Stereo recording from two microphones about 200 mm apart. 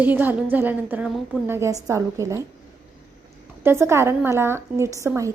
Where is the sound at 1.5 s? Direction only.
15° right (ahead or behind).